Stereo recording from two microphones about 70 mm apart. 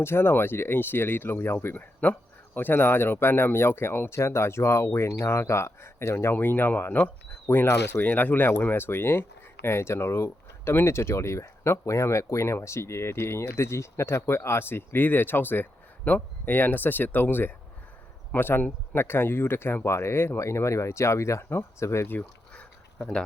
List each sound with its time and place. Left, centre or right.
0.0 s speech: left
8.0 s speech: left